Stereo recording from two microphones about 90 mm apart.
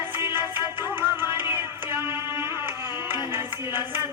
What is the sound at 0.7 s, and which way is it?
Music, 25° right (ahead or behind).